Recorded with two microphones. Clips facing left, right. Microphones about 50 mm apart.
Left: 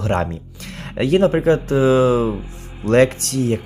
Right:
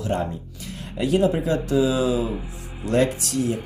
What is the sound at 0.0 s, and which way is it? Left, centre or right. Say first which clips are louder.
Speech: left 5 dB; left.